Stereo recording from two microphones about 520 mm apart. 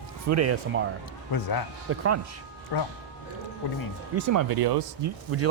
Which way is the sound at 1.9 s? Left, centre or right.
Right.